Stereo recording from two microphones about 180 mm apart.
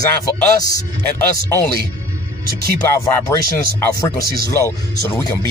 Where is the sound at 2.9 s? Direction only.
10° left (ahead or behind).